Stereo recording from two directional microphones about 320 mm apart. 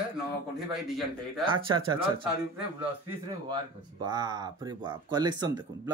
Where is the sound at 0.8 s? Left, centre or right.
Centre.